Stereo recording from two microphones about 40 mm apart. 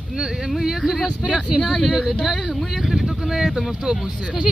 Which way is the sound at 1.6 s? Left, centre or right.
Centre.